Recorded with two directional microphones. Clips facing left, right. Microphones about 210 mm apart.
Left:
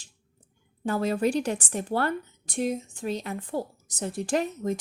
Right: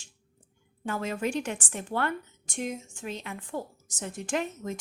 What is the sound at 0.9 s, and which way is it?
A woman's voice, 35° left (ahead or behind).